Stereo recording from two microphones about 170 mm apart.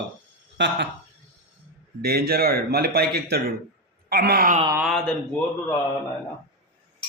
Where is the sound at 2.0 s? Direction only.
65° right (ahead or behind).